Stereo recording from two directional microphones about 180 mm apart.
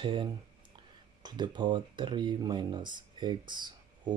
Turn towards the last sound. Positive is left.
turn(degrees=-25)  # may be behind; listen again after turning